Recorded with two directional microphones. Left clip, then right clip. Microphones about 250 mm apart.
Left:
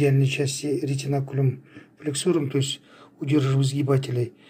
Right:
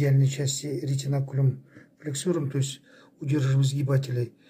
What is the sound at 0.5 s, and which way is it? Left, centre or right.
Speech, left.